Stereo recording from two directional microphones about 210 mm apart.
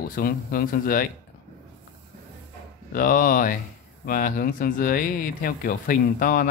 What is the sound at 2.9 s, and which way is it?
Speech, 40° left (ahead or behind).